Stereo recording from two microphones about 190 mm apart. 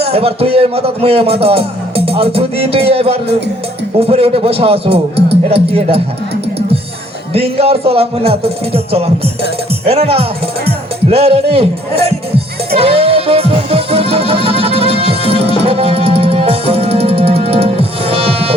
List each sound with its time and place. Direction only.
0.0 s speech: 30° right (ahead or behind)
7.3 s speech: 30° right (ahead or behind)
12.7 s music: 30° right (ahead or behind)